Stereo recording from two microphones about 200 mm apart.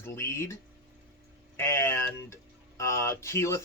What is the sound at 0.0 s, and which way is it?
Speech, 15° left (ahead or behind).